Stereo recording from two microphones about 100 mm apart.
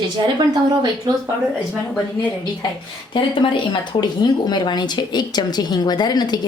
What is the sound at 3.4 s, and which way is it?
Speech, 55° left (ahead or behind).